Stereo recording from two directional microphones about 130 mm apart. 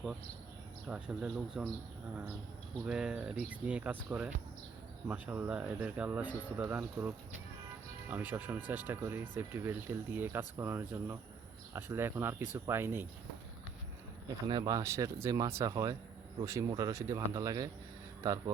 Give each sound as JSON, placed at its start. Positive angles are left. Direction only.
{"t": 0.9, "sound": "speech", "side_deg": -5}
{"t": 2.8, "sound": "speech", "side_deg": -5}
{"t": 14.4, "sound": "speech", "side_deg": -35}